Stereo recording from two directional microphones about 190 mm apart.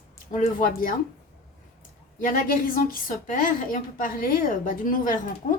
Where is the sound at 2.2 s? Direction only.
45° left (ahead or behind).